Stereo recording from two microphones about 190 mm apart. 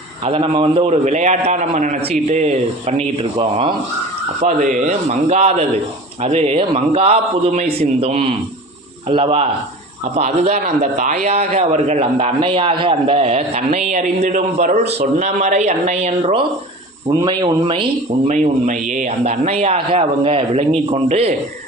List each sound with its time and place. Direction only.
0.3 s a man's voice: 35° right (ahead or behind)
4.4 s a man's voice: 40° right (ahead or behind)
17.1 s speech: 20° right (ahead or behind)
18.3 s a man's voice: 40° right (ahead or behind)